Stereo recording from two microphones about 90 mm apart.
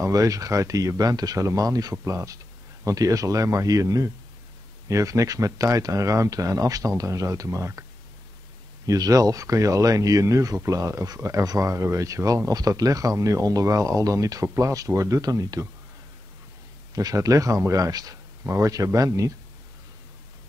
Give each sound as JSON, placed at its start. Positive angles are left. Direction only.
{"t": 0.0, "sound": "speech", "side_deg": -40}
{"t": 8.8, "sound": "speech", "side_deg": -40}
{"t": 16.9, "sound": "speech", "side_deg": -40}